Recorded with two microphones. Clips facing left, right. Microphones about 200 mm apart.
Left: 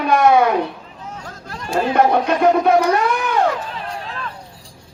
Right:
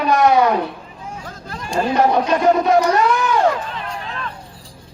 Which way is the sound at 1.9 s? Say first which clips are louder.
Even; 55° left (ahead or behind).